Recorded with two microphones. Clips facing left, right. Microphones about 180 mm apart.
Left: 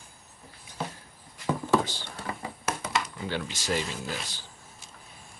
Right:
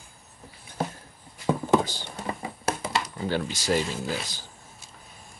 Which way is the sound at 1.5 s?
15° right (ahead or behind).